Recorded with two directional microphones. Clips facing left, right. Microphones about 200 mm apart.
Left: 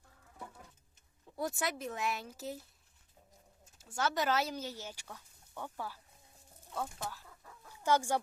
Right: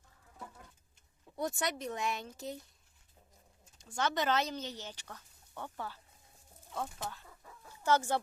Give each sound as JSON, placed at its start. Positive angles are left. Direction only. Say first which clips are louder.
{"t": 1.4, "sound": "speech", "louder": "right 1 dB", "side_deg": 0}
{"t": 3.8, "sound": "speech", "louder": "even", "side_deg": 5}
{"t": 6.7, "sound": "speech", "louder": "even", "side_deg": -5}
{"t": 7.7, "sound": "speech", "louder": "even", "side_deg": 10}